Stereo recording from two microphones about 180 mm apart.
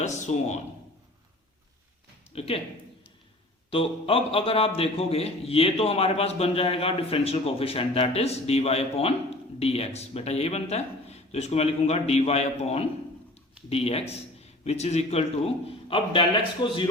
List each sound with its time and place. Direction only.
0.0 s a man's voice: 40° left (ahead or behind)
2.3 s a man's voice: 35° left (ahead or behind)
3.7 s a man's voice: 30° left (ahead or behind)